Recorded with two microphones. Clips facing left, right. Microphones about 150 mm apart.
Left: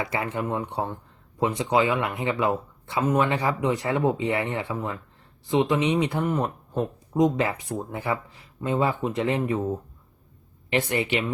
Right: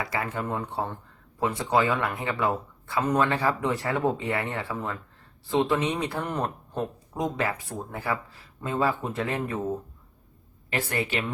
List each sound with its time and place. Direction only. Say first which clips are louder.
0.0 s speech: left 2 dB; 25° left (ahead or behind)
10.7 s speech: left 4 dB; 20° left (ahead or behind)